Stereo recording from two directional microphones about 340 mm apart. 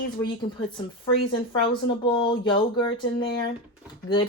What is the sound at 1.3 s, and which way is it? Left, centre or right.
Speech, centre.